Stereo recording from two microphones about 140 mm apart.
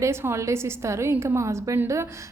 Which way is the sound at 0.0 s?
20° right (ahead or behind).